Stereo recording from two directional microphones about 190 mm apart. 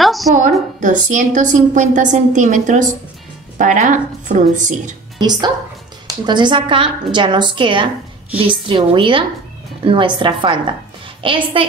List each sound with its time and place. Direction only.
0.0 s a sound: centre (ahead or behind)
0.3 s a woman's voice: 40° right (ahead or behind)
5.2 s a woman's voice: 20° right (ahead or behind)